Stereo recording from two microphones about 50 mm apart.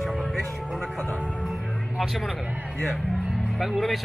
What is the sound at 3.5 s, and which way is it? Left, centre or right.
Speech, centre.